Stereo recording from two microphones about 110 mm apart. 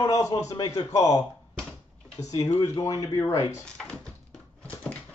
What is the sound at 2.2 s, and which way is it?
A man's voice, 35° left (ahead or behind).